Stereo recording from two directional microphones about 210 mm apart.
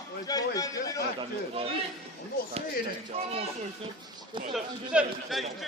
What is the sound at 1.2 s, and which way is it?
Speech, 25° right (ahead or behind).